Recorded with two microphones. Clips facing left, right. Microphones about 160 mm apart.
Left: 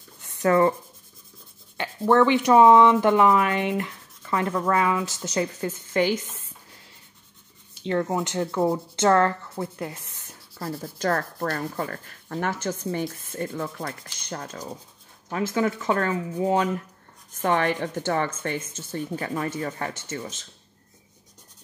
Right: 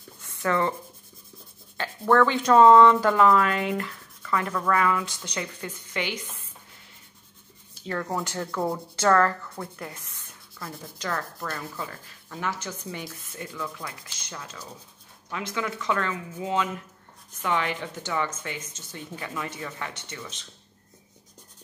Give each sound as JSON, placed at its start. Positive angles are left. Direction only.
{"t": 0.2, "sound": "writing", "side_deg": 25}
{"t": 1.8, "sound": "speech", "side_deg": 20}
{"t": 5.0, "sound": "a woman's voice", "side_deg": 40}
{"t": 7.8, "sound": "a woman's voice", "side_deg": 25}